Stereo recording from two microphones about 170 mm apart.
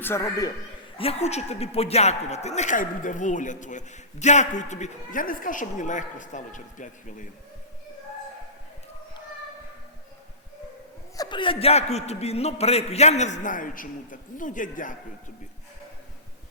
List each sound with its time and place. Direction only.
0.0 s a man's voice: 15° left (ahead or behind)
0.9 s speech: 35° left (ahead or behind)
11.2 s a man's voice: 30° left (ahead or behind); by 14.9 s 50° left (ahead or behind)